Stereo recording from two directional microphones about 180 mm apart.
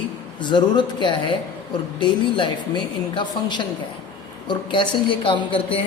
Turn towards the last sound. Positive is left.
turn(degrees=30)  # may be behind; listen again after turning